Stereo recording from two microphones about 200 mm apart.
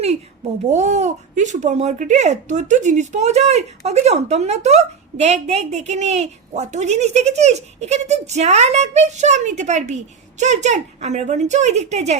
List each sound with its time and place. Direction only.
0.7 s speech: 35° right (ahead or behind)